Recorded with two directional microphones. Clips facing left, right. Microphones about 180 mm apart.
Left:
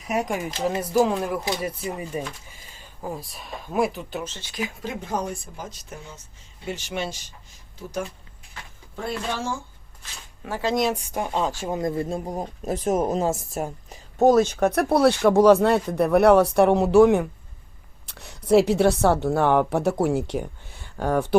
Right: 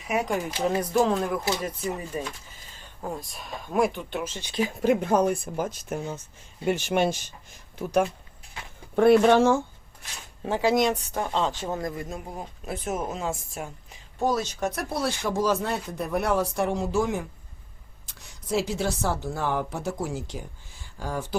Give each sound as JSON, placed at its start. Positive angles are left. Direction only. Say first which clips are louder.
{"t": 0.3, "sound": "a woman's voice", "louder": "even", "side_deg": 5}
{"t": 4.2, "sound": "speech", "louder": "right 1 dB", "side_deg": -15}
{"t": 4.8, "sound": "speech", "louder": "right 10 dB", "side_deg": -60}
{"t": 10.8, "sound": "a woman's voice", "louder": "even", "side_deg": 5}
{"t": 11.8, "sound": "a woman's voice", "louder": "left 7 dB", "side_deg": 30}